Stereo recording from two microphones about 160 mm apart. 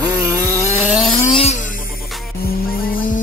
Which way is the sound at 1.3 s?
40° left (ahead or behind).